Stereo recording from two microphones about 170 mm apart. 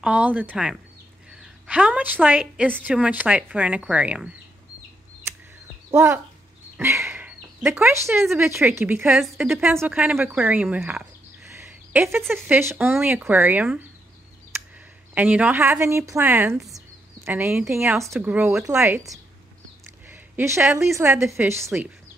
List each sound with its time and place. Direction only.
0.0 s speech: 10° right (ahead or behind)
5.9 s speech: 15° right (ahead or behind)
6.8 s a sound: 15° right (ahead or behind)
8.4 s a woman's voice: 15° right (ahead or behind)
15.1 s speech: 10° right (ahead or behind)
20.1 s a sound: 15° right (ahead or behind)
20.9 s speech: 15° right (ahead or behind)